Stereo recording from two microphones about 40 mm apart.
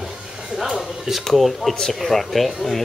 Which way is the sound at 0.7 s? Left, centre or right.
Centre.